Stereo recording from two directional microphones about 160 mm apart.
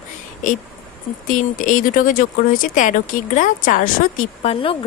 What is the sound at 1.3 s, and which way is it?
A woman's voice, 55° left (ahead or behind).